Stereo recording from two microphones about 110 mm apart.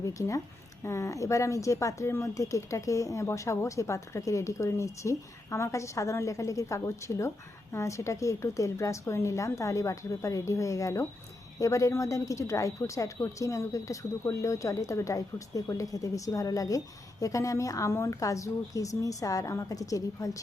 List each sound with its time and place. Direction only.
0.0 s speech: 30° left (ahead or behind)